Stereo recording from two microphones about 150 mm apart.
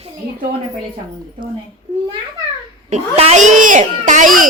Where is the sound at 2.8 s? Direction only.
45° right (ahead or behind); by 4.5 s 65° right (ahead or behind).